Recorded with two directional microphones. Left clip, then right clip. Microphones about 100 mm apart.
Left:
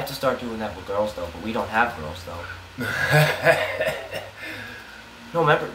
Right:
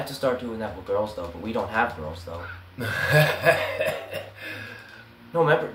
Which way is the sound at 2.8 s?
50° right (ahead or behind).